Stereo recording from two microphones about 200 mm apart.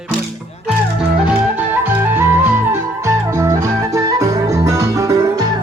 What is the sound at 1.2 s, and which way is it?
Music, 10° right (ahead or behind).